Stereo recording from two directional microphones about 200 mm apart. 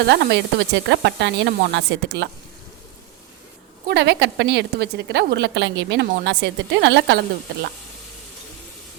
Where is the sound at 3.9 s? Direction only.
60° right (ahead or behind).